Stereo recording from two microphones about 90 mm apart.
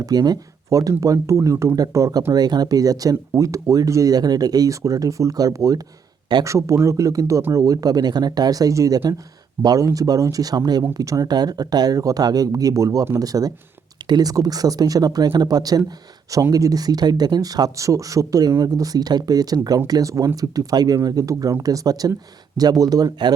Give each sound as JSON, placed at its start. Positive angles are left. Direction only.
{"t": 0.0, "sound": "speech", "side_deg": -45}
{"t": 2.3, "sound": "speech", "side_deg": -50}